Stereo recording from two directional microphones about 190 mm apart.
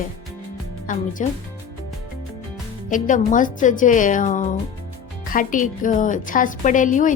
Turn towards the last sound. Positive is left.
turn(degrees=45)  # may be behind; listen again after turning